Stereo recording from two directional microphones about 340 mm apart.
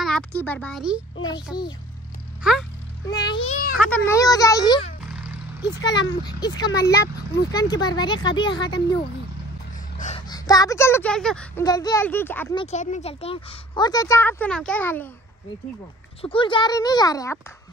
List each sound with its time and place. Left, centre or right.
0.0 s speech: centre
1.2 s speech: centre
3.3 s a child's voice: centre
3.8 s speech: centre
5.6 s a child's voice: left
5.9 s speech: centre
9.9 s speech: centre
12.7 s speech: centre
16.2 s speech: centre